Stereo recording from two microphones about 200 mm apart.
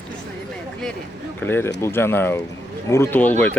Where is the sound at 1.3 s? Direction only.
10° left (ahead or behind).